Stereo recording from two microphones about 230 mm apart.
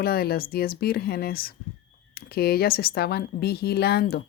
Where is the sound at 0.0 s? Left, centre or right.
Left.